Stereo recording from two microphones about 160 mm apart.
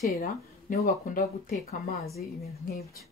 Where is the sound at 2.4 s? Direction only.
75° left (ahead or behind).